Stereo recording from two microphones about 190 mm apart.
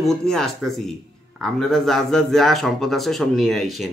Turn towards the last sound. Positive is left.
turn(degrees=0)  # may be behind; listen again after turning